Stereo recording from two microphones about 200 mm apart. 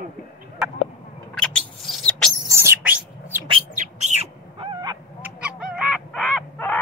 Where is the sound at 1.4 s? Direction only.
5° left (ahead or behind).